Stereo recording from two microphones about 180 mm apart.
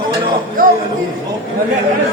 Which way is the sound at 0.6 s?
50° right (ahead or behind).